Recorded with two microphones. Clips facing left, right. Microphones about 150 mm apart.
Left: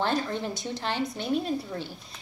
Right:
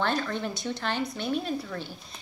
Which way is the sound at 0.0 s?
30° left (ahead or behind).